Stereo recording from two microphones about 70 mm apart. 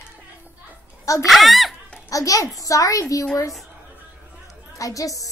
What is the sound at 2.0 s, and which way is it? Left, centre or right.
A child's voice, left.